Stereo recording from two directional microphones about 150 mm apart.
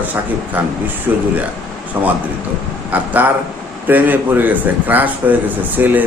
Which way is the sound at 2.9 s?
10° right (ahead or behind).